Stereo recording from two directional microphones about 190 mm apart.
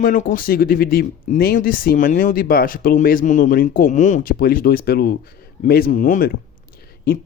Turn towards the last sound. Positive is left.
turn(degrees=55)  # may be behind; listen again after turning